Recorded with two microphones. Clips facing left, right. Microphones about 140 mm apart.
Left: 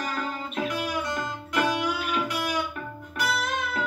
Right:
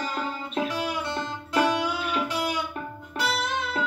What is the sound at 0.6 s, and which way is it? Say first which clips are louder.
Music: even; 30° right (ahead or behind).